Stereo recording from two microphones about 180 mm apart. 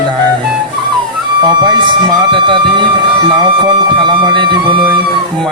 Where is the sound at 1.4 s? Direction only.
25° right (ahead or behind).